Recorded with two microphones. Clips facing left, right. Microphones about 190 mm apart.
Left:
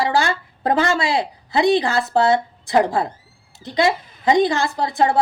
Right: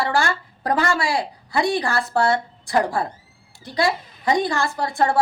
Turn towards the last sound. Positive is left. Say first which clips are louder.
# left 2 dB
turn(degrees=20)  # may be behind; listen again after turning